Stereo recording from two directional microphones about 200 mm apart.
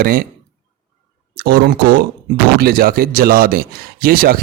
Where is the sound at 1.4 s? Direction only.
50° right (ahead or behind).